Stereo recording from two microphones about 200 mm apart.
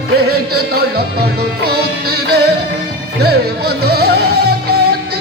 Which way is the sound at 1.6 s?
50° right (ahead or behind).